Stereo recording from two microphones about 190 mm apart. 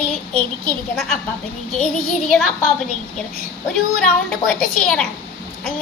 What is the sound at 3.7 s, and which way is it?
A child's voice, 5° left (ahead or behind).